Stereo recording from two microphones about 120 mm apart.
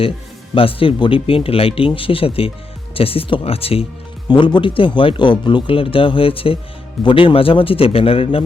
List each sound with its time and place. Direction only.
0.5 s speech: 50° left (ahead or behind)
4.3 s speech: 40° left (ahead or behind)